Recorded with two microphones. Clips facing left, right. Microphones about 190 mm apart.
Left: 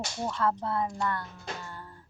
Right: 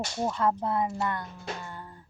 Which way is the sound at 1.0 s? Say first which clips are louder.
Right 1 dB; 20° right (ahead or behind).